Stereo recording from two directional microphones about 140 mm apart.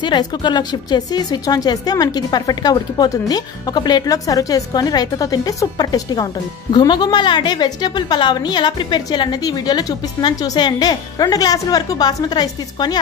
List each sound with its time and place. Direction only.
0.0 s a woman's voice: 30° left (ahead or behind)